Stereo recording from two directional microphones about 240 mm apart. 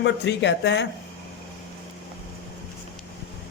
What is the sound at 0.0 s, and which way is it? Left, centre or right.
Speech, left.